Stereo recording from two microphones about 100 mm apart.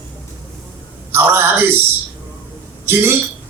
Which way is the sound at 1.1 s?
25° right (ahead or behind).